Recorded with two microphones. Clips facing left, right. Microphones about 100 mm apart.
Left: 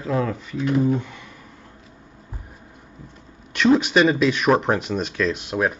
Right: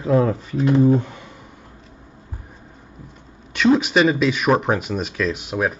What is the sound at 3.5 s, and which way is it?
Speech, centre (ahead or behind).